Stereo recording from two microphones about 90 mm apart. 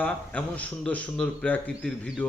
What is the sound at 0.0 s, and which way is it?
Speech, 15° left (ahead or behind).